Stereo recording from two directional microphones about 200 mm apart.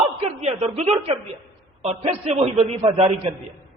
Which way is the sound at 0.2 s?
30° right (ahead or behind).